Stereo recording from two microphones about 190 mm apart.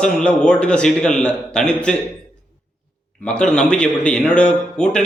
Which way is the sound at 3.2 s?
5° left (ahead or behind).